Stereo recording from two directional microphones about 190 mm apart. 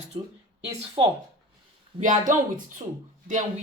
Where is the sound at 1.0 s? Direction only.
30° right (ahead or behind).